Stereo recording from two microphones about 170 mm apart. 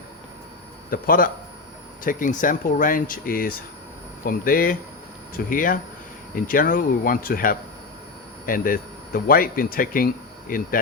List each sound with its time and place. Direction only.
0.9 s a man's voice: 55° left (ahead or behind)